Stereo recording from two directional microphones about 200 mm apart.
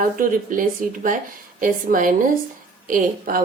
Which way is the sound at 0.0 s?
45° right (ahead or behind).